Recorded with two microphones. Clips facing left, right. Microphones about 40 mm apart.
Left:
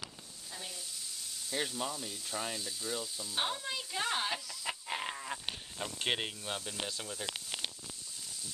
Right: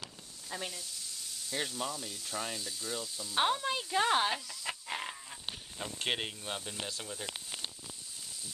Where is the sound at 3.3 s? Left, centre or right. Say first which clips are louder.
Right 6 dB; centre.